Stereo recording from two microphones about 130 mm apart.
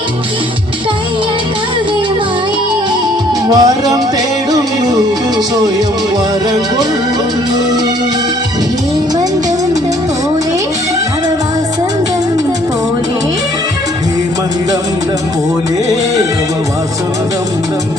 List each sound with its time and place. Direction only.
3.5 s music: 30° right (ahead or behind)